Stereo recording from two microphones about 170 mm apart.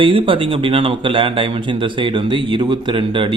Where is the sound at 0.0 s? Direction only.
30° right (ahead or behind).